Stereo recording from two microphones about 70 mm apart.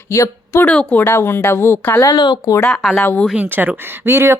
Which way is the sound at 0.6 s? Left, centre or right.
Left.